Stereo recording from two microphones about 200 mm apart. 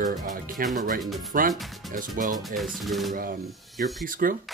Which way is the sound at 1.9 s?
40° right (ahead or behind).